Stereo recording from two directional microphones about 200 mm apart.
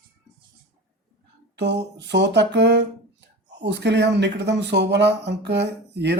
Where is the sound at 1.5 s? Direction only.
60° right (ahead or behind).